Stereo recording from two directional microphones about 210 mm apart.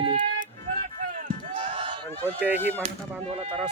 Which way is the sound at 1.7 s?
25° right (ahead or behind).